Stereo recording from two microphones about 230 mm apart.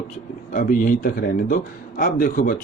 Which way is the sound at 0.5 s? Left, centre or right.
Left.